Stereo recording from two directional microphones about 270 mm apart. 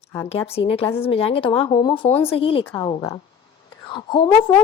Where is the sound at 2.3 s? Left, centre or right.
Left.